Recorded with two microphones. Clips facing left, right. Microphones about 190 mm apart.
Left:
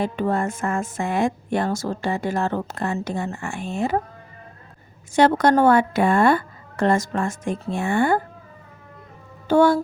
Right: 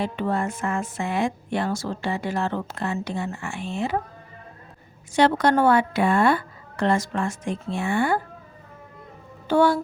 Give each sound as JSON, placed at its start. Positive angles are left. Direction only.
{"t": 0.0, "sound": "a woman's voice", "side_deg": 45}
{"t": 5.1, "sound": "a woman's voice", "side_deg": 45}
{"t": 9.5, "sound": "a woman's voice", "side_deg": 45}